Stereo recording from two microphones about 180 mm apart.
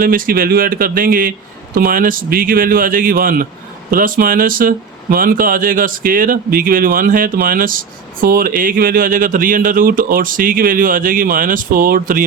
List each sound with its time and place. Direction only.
0.0 s speech: 50° right (ahead or behind)